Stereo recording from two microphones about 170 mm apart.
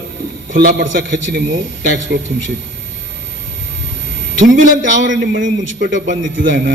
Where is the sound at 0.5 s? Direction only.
65° right (ahead or behind).